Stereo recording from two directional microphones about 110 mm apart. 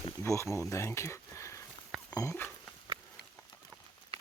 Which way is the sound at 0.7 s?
25° left (ahead or behind).